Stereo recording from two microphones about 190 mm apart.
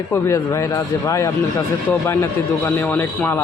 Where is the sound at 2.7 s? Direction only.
10° left (ahead or behind).